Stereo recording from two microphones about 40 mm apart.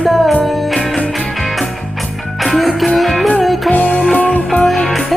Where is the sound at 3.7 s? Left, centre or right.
Left.